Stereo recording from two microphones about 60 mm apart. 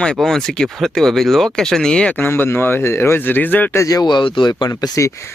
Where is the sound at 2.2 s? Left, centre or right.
Left.